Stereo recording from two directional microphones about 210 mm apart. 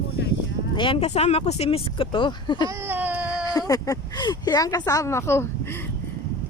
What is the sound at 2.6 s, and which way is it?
Baby cry, 10° right (ahead or behind).